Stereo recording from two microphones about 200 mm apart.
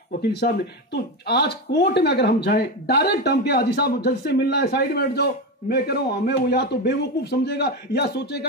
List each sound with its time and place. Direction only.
0.9 s a man's voice: 55° left (ahead or behind)